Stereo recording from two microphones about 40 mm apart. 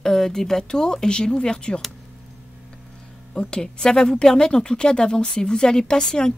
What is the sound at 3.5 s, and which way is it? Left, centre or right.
Speech, centre.